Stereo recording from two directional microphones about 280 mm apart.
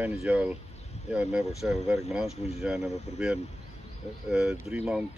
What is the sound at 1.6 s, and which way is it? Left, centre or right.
Speech, centre.